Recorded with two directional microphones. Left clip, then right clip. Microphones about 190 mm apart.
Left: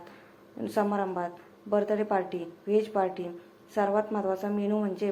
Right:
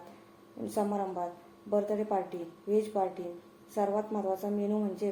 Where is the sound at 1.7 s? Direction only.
25° left (ahead or behind).